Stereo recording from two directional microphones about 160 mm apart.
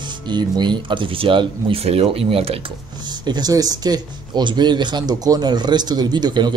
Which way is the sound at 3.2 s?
25° right (ahead or behind).